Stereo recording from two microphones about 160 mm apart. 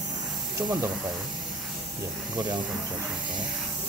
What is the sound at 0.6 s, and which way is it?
Speech, 10° right (ahead or behind).